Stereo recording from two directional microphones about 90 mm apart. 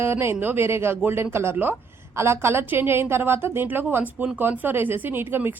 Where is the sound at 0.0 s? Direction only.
30° right (ahead or behind).